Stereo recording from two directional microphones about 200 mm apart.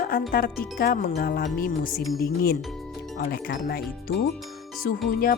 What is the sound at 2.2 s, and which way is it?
A woman's voice, 50° left (ahead or behind).